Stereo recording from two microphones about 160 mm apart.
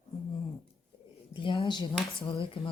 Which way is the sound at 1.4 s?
30° left (ahead or behind).